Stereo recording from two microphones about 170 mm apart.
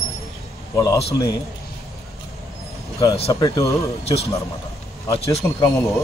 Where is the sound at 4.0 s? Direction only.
35° left (ahead or behind).